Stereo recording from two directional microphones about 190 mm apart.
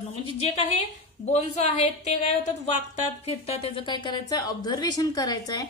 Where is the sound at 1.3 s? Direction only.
35° left (ahead or behind).